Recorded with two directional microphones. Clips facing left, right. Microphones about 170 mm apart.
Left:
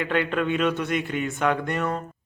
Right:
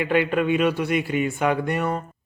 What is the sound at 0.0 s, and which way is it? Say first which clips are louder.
Speech: right 3 dB; 10° right (ahead or behind).